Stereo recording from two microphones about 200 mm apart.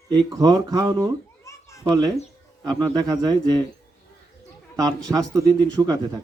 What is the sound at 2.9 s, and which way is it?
Speech, 20° right (ahead or behind).